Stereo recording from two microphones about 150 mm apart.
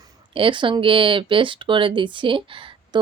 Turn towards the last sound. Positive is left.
turn(degrees=-35)  # may be behind; listen again after turning